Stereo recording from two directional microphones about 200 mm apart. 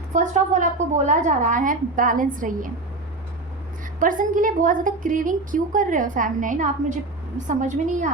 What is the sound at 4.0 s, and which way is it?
A woman's voice, 40° right (ahead or behind).